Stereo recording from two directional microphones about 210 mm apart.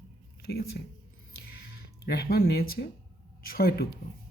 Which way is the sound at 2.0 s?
50° left (ahead or behind).